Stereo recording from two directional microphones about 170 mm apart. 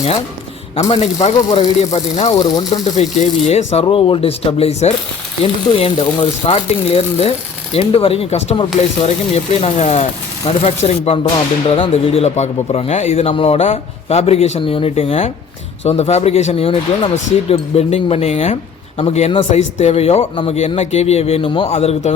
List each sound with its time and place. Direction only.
0.8 s speech: 40° left (ahead or behind)
2.3 s speech: 25° left (ahead or behind)
3.0 s speech: 40° left (ahead or behind)